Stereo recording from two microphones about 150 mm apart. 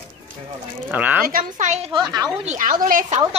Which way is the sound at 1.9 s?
25° right (ahead or behind).